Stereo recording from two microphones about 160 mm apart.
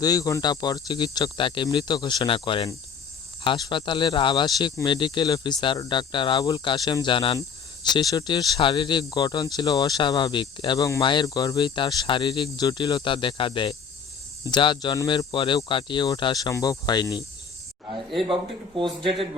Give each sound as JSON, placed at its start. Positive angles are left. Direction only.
{"t": 0.0, "sound": "speech", "side_deg": 20}
{"t": 18.8, "sound": "speech", "side_deg": -30}